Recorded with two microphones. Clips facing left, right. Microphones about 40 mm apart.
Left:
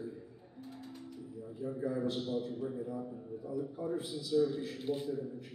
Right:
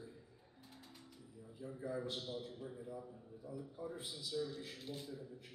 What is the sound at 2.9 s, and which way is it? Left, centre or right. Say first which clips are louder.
Speech: left 9 dB; left.